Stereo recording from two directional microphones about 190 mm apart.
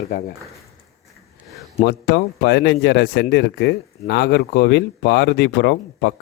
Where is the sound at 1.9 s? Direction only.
65° left (ahead or behind).